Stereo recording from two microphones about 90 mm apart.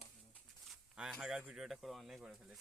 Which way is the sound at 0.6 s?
5° right (ahead or behind).